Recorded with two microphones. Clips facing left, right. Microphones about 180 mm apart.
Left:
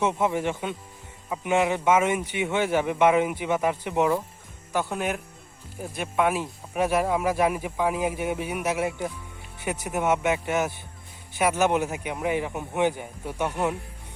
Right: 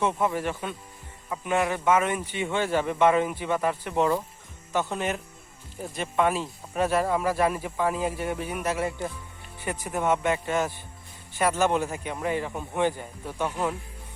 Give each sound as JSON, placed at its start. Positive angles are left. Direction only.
{"t": 0.0, "sound": "speech", "side_deg": 15}